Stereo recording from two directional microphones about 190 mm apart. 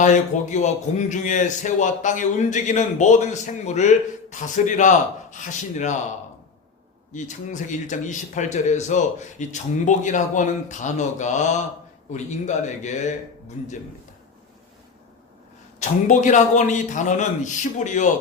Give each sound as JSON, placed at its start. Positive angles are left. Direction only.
{"t": 0.0, "sound": "speech", "side_deg": 40}
{"t": 7.1, "sound": "speech", "side_deg": 40}
{"t": 15.8, "sound": "speech", "side_deg": 40}